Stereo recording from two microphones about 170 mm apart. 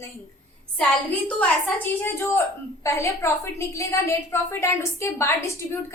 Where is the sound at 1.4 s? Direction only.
10° left (ahead or behind).